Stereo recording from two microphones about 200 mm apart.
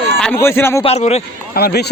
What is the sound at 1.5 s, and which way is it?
Speech, 50° left (ahead or behind).